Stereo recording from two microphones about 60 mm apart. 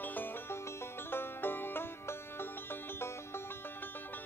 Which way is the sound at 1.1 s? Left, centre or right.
Left.